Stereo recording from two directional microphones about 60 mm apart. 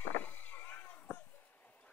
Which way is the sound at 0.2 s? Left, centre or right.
Left.